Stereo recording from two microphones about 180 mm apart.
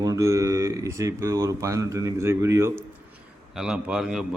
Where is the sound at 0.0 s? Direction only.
20° right (ahead or behind).